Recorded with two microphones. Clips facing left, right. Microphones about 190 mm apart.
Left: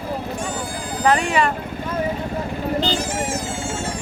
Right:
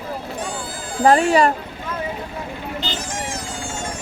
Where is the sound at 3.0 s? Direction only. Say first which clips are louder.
Left 5 dB; 10° left (ahead or behind).